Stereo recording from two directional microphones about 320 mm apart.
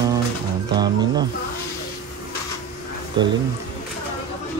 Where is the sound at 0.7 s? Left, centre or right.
Centre.